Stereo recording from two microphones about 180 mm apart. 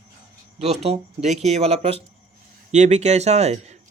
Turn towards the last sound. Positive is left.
turn(degrees=-40)  # may be behind; listen again after turning